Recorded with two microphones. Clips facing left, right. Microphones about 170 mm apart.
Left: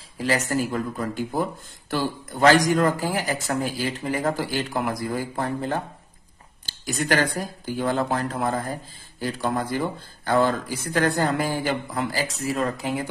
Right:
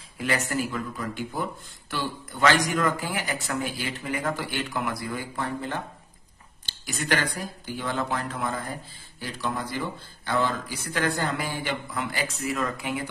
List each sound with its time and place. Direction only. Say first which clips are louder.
0.2 s speech: left 4 dB; 35° left (ahead or behind)
9.2 s speech: left 5 dB; 50° left (ahead or behind)